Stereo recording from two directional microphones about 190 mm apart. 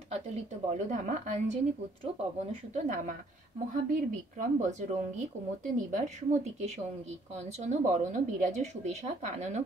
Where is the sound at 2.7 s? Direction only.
40° right (ahead or behind).